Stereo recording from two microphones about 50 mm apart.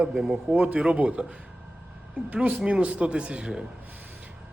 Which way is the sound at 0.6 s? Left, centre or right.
Right.